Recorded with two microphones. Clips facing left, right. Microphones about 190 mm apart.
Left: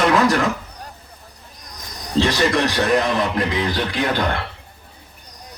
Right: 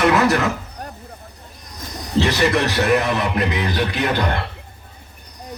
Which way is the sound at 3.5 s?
20° right (ahead or behind).